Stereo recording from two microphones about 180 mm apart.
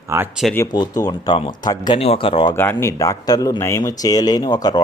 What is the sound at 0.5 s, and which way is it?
Speech, 20° left (ahead or behind).